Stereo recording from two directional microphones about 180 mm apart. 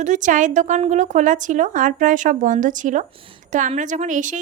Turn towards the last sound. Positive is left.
turn(degrees=-45)  # may be behind; listen again after turning